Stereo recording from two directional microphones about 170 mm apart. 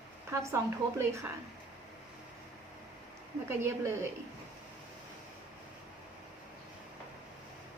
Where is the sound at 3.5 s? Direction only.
15° right (ahead or behind).